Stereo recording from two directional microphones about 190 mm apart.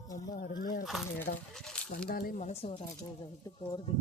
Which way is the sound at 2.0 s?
55° left (ahead or behind).